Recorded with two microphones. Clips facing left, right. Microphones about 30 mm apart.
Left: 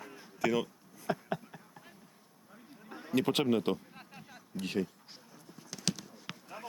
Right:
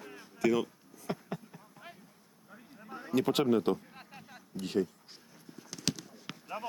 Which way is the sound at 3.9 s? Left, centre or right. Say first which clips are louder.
Right 1 dB; centre.